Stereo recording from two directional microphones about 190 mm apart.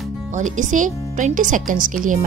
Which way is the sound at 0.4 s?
40° right (ahead or behind).